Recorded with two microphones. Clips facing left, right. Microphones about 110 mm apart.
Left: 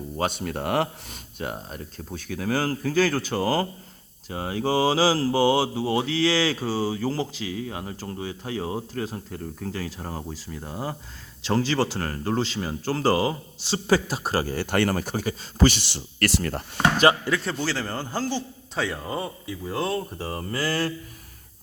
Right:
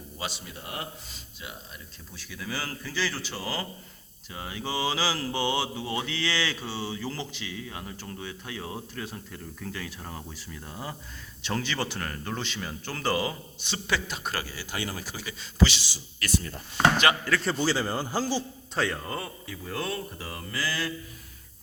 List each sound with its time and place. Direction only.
0.2 s speech: 55° left (ahead or behind); by 14.5 s 35° left (ahead or behind)
14.5 s speech: 60° left (ahead or behind)
17.0 s speech: 30° left (ahead or behind)
17.6 s a man's voice: 15° right (ahead or behind)
19.0 s speech: 15° left (ahead or behind); by 20.9 s 40° left (ahead or behind)